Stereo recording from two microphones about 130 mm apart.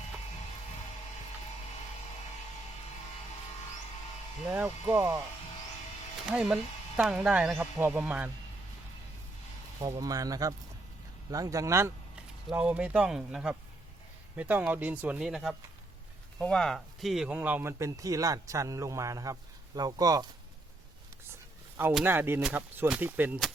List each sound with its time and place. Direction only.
4.4 s speech: 10° right (ahead or behind)
6.2 s speech: 5° right (ahead or behind)
9.8 s speech: 25° right (ahead or behind)
12.5 s speech: 10° right (ahead or behind); by 20.2 s 30° right (ahead or behind)
22.0 s speech: 15° right (ahead or behind)